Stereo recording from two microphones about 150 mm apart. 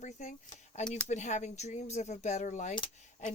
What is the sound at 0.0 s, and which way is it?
Speech, 55° left (ahead or behind).